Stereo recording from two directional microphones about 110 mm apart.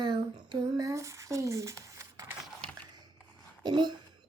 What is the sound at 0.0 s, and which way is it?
Female singing, 40° right (ahead or behind).